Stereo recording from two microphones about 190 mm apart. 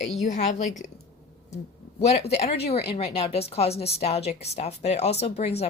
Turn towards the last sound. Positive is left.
turn(degrees=35)  # may be behind; listen again after turning